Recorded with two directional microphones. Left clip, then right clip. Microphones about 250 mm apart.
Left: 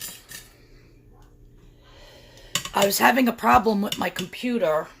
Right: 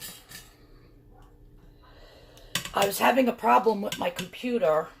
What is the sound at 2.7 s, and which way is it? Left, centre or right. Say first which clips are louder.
Speech: left 4 dB; left.